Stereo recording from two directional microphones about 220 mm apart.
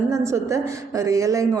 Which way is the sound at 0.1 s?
15° right (ahead or behind).